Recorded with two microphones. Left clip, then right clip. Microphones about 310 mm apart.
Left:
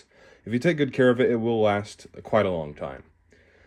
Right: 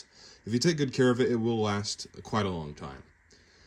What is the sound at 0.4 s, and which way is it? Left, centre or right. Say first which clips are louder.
Speech: left 5 dB; centre.